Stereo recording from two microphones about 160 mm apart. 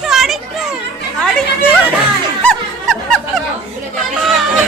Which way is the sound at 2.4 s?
Centre (ahead or behind).